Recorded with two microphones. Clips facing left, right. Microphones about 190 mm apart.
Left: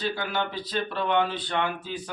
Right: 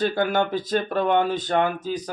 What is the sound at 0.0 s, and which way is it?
A man's voice, 50° right (ahead or behind).